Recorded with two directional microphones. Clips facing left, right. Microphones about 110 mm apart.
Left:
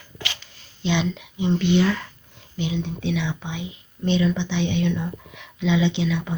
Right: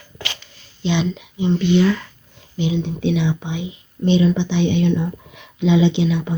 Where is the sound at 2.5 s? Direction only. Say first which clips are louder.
Right 5 dB; centre (ahead or behind).